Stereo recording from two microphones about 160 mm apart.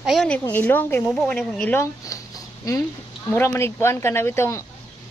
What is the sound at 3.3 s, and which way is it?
Speech, 15° left (ahead or behind).